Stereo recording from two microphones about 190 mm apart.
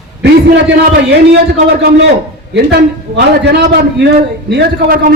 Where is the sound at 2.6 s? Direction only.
60° right (ahead or behind).